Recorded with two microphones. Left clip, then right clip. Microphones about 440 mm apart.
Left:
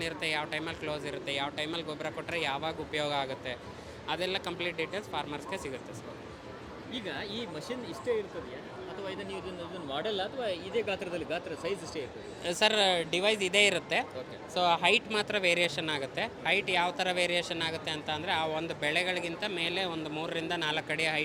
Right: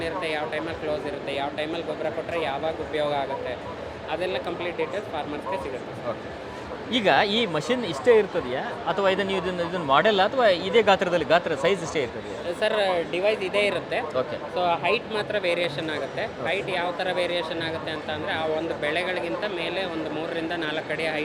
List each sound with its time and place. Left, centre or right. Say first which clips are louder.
0.0 s speech: right 6 dB; left
6.9 s speech: right 18 dB; right
12.5 s speech: right 3 dB; left